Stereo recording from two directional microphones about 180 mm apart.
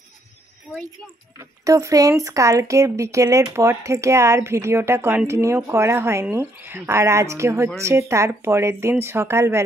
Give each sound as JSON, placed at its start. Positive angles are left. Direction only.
{"t": 1.6, "sound": "speech", "side_deg": -15}